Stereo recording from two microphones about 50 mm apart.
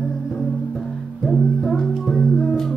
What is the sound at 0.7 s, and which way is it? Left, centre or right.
Music, centre.